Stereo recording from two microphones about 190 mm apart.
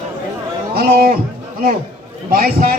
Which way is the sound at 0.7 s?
50° right (ahead or behind).